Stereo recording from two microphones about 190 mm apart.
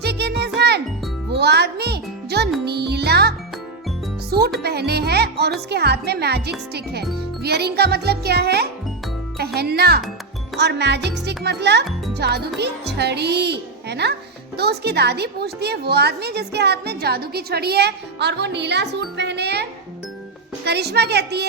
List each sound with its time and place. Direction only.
0.0 s music: 60° right (ahead or behind)
4.6 s speech: 60° right (ahead or behind)
20.7 s speech: 60° right (ahead or behind)